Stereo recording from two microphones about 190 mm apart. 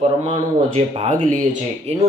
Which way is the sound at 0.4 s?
35° right (ahead or behind).